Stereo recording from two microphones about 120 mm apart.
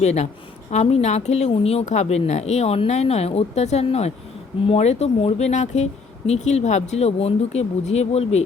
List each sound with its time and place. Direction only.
0.0 s speech: 65° left (ahead or behind)